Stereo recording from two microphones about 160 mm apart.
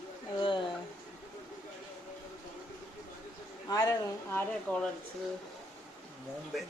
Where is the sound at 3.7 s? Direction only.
20° left (ahead or behind).